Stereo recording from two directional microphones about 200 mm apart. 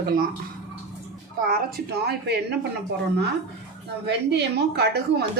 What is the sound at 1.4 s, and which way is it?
Speech, 50° right (ahead or behind).